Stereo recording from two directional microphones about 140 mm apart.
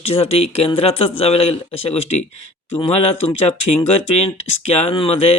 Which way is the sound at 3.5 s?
50° left (ahead or behind).